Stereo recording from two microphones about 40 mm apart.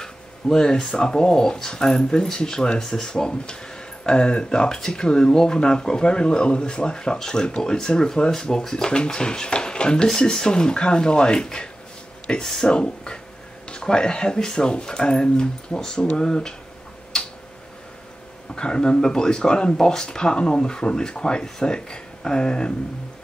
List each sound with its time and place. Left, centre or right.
0.0 s speech: centre
18.5 s speech: left